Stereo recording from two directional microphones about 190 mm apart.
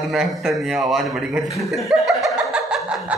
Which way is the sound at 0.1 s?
Centre (ahead or behind).